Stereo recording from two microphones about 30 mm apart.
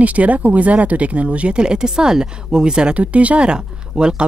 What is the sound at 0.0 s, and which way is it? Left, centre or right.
Speech, right.